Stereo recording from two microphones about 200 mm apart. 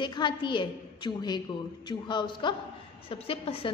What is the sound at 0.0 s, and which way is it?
A woman's voice, 20° left (ahead or behind).